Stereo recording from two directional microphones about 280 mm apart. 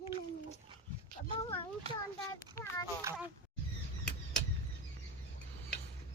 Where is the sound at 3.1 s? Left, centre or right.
Centre.